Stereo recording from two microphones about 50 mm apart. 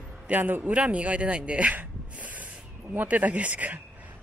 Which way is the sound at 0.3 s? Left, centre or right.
Right.